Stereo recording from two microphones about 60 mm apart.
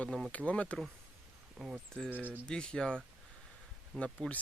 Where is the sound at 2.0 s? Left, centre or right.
Right.